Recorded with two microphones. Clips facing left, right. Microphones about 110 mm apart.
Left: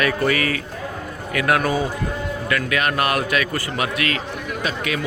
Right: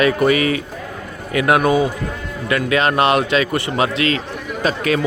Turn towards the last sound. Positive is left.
turn(degrees=-40)  # may be behind; listen again after turning